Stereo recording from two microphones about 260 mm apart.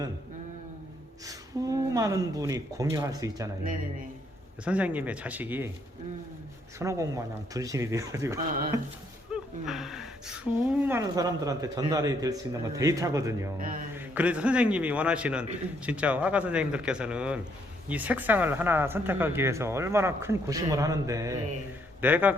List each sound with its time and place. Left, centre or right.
1.2 s speech: centre
4.6 s speech: centre
6.7 s speech: centre
9.3 s speech: centre
13.6 s a sound: right
13.9 s speech: centre